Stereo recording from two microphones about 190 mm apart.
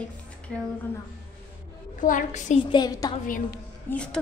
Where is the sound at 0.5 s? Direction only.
5° left (ahead or behind).